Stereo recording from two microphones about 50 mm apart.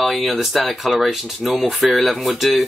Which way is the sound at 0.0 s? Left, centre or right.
Centre.